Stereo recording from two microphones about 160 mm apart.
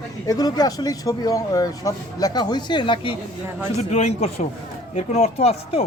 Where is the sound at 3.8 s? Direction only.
45° left (ahead or behind).